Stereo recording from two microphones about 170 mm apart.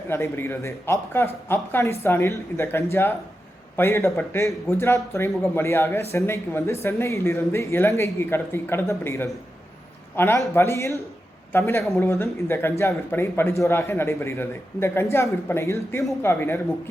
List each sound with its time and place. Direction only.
0.1 s speech: 15° left (ahead or behind)